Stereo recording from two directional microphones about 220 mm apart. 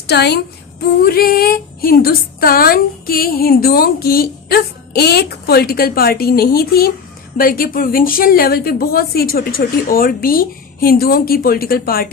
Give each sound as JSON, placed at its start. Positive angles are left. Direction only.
{"t": 0.1, "sound": "a woman's voice", "side_deg": 50}